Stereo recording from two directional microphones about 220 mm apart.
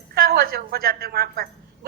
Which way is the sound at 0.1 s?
45° right (ahead or behind).